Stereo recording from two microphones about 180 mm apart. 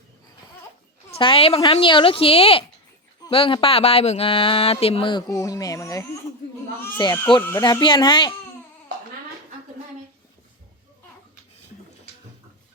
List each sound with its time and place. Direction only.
1.1 s speech: 30° left (ahead or behind)